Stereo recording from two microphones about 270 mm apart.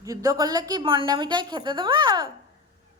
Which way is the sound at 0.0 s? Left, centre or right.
Centre.